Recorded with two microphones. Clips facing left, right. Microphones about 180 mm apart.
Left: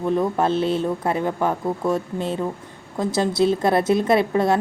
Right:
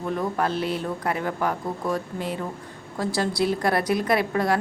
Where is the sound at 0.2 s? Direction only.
25° left (ahead or behind).